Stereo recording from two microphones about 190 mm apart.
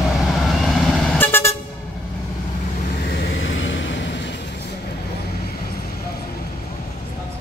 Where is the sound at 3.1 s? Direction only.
70° left (ahead or behind).